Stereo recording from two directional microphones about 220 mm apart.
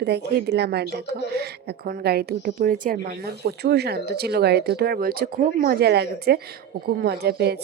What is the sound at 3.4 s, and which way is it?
Speech, 50° right (ahead or behind).